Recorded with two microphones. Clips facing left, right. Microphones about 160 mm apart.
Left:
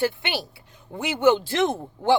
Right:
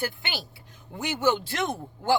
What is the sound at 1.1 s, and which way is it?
A woman's voice, 25° left (ahead or behind).